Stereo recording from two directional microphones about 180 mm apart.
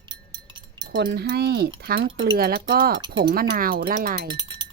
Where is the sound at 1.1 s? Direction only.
60° right (ahead or behind).